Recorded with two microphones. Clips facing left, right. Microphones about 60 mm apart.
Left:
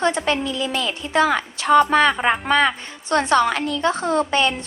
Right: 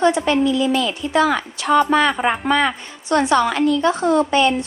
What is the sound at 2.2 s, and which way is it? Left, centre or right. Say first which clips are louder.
Speech: even; left.